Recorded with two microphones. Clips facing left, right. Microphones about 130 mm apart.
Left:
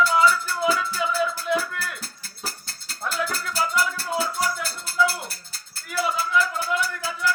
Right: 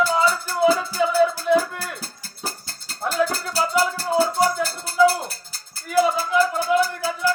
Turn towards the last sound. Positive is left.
turn(degrees=-40)  # may be behind; listen again after turning